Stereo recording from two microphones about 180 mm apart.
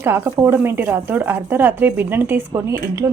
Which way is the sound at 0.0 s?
10° right (ahead or behind).